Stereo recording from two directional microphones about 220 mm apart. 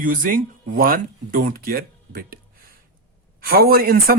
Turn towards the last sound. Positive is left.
turn(degrees=-45)  # may be behind; listen again after turning